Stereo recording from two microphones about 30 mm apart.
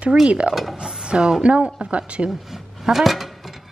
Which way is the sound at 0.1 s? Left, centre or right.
Right.